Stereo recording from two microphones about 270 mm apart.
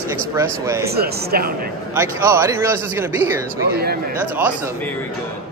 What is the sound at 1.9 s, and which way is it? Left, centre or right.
A man's voice, centre.